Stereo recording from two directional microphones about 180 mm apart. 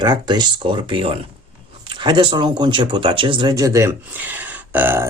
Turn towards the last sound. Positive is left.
turn(degrees=-10)  # may be behind; listen again after turning